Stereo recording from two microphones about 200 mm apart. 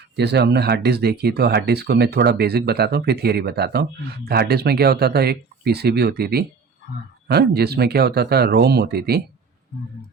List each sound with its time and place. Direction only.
0.2 s speech: 55° right (ahead or behind)